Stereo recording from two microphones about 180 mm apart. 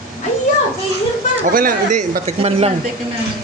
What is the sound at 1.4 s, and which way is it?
Speech, 50° right (ahead or behind).